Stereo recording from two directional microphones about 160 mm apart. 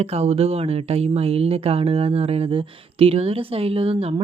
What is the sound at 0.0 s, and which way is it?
Speech, 40° right (ahead or behind).